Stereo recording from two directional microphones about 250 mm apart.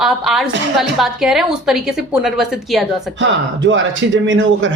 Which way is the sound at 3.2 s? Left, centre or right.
Right.